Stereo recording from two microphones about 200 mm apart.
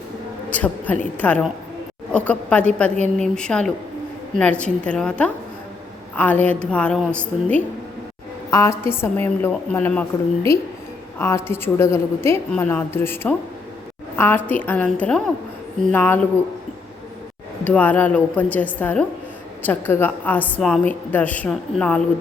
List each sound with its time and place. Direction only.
0.5 s a woman's voice: 10° left (ahead or behind)
17.6 s a woman's voice: 10° left (ahead or behind)